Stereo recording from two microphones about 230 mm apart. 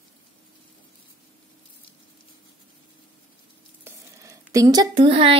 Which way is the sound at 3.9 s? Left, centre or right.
Centre.